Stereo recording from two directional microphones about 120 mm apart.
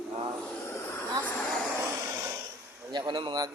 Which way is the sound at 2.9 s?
40° right (ahead or behind).